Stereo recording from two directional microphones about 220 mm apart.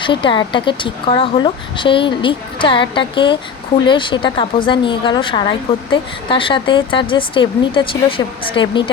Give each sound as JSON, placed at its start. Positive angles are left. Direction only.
{"t": 0.0, "sound": "a woman's voice", "side_deg": 20}